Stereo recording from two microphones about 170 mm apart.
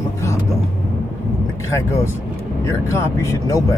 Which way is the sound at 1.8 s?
15° left (ahead or behind).